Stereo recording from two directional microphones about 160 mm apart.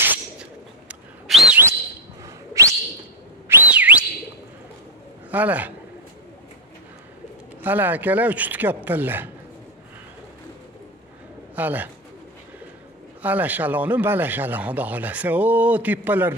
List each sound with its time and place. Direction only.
0.0 s bird: 10° right (ahead or behind)
2.2 s whistling: 20° right (ahead or behind)
3.4 s whistle: 10° right (ahead or behind)
5.3 s speech: 10° right (ahead or behind)
7.6 s speech: 10° right (ahead or behind)
11.5 s speech: 10° right (ahead or behind)
13.2 s speech: 10° right (ahead or behind)